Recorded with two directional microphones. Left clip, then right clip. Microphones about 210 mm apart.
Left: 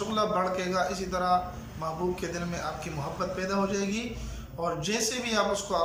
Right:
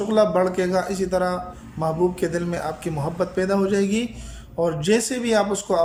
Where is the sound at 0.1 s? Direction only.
35° right (ahead or behind).